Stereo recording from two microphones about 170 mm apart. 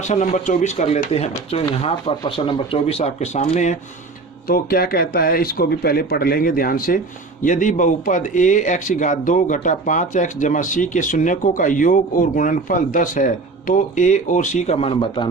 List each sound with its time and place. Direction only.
0.0 s speech: 45° left (ahead or behind)
4.4 s speech: 60° left (ahead or behind); by 15.3 s 30° left (ahead or behind)